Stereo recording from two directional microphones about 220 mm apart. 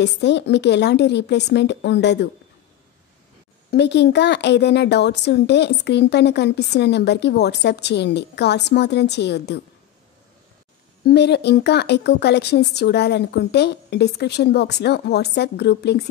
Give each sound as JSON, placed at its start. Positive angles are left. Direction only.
{"t": 0.0, "sound": "speech", "side_deg": 50}
{"t": 3.7, "sound": "speech", "side_deg": 50}
{"t": 11.1, "sound": "speech", "side_deg": 50}